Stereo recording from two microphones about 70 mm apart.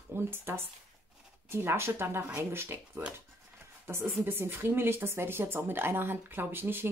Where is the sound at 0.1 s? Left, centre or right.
Right.